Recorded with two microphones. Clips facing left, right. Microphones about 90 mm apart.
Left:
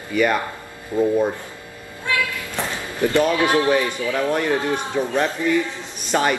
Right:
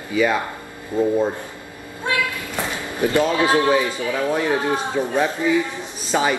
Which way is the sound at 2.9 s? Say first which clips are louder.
Even; 20° right (ahead or behind).